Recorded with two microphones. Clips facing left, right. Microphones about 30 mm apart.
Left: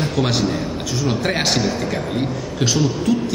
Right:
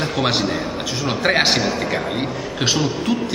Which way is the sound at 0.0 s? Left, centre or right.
Centre.